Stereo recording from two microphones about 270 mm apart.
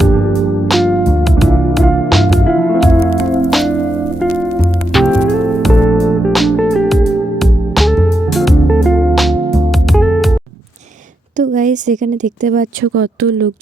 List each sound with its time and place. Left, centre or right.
0.7 s music: centre
11.3 s a sound: right
13.0 s speech: right